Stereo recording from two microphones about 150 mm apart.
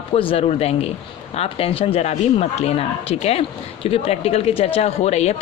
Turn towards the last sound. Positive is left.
turn(degrees=45)  # may be behind; listen again after turning